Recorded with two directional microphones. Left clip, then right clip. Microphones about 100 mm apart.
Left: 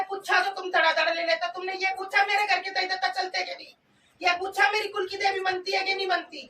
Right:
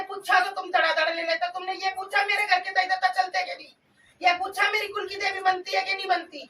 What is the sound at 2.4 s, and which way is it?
Music, 15° left (ahead or behind).